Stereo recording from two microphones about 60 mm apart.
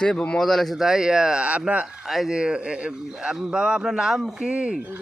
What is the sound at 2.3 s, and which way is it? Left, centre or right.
A man's voice, centre.